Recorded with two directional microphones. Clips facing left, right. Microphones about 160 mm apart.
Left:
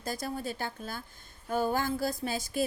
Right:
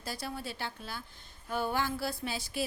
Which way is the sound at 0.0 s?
45° left (ahead or behind).